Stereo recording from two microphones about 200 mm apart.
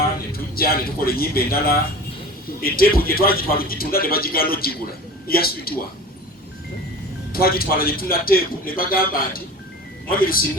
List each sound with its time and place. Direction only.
0.3 s a man's voice: 50° left (ahead or behind)
7.3 s a man's voice: 50° left (ahead or behind)